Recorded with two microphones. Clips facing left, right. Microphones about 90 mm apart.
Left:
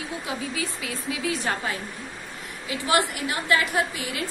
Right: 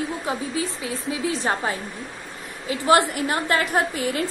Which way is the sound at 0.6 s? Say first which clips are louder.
Right 4 dB; 30° right (ahead or behind).